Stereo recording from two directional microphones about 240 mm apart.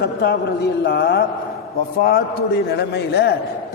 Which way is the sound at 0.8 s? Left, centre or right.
Left.